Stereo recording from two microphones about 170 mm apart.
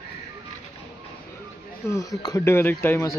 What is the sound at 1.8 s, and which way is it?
Speech, 20° left (ahead or behind).